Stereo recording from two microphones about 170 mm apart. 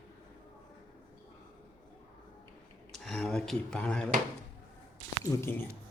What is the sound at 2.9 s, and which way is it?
Speech, centre (ahead or behind).